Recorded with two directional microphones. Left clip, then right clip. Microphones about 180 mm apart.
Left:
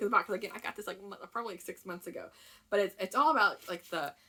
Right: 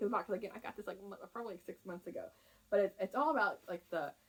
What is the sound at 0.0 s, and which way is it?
Speech, 20° left (ahead or behind).